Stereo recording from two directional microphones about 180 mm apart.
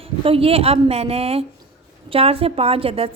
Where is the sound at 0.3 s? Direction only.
30° right (ahead or behind).